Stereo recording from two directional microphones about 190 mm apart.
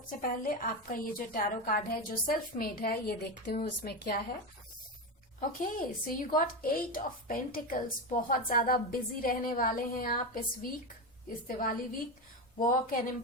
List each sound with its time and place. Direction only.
0.1 s a woman's voice: 45° left (ahead or behind)
5.4 s a woman's voice: 45° left (ahead or behind)